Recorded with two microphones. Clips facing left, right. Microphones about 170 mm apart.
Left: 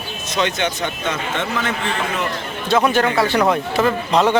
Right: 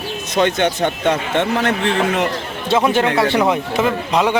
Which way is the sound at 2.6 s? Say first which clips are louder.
Right 1 dB; 25° right (ahead or behind).